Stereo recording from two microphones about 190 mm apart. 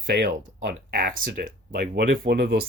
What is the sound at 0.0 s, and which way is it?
Speech, 55° right (ahead or behind).